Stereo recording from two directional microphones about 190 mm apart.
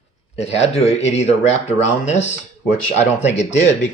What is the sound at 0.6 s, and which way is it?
Speech, 35° left (ahead or behind).